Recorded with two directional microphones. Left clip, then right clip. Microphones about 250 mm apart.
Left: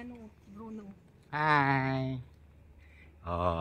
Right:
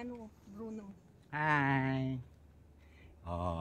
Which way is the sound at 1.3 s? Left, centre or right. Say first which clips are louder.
Left 5 dB; centre.